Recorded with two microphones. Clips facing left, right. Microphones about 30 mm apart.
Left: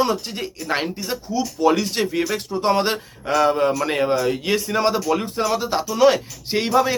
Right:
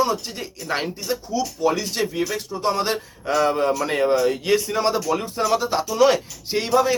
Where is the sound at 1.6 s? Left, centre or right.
Left.